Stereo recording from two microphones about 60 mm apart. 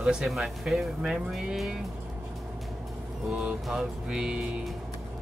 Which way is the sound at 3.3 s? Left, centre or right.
Centre.